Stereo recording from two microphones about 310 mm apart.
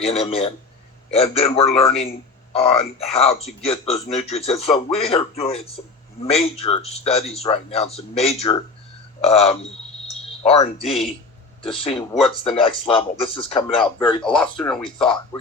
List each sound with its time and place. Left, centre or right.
0.0 s speech: centre
14.2 s speech: centre
14.8 s speech: centre